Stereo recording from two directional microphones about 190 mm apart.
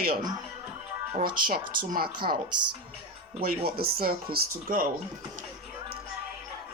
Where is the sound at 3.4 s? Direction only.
50° right (ahead or behind).